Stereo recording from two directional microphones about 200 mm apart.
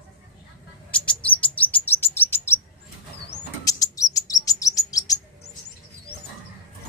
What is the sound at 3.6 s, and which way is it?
Chirp, 15° left (ahead or behind).